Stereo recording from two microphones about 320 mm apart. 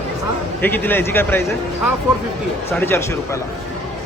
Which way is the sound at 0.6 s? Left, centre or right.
Centre.